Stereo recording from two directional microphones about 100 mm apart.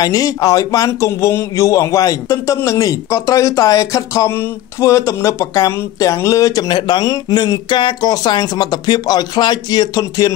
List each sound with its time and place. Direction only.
0.0 s a man's voice: 40° left (ahead or behind)